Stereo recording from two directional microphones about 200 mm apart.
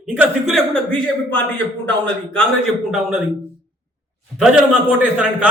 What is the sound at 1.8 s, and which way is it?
Speech, 5° left (ahead or behind).